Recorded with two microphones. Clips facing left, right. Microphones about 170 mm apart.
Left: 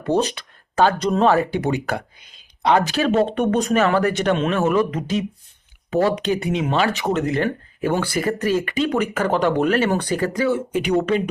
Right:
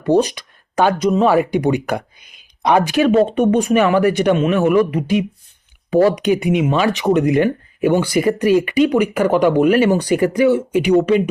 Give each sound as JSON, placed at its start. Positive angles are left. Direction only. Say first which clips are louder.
{"t": 0.0, "sound": "speech", "louder": "right 5 dB", "side_deg": -15}
{"t": 6.0, "sound": "speech", "louder": "right 5 dB", "side_deg": -10}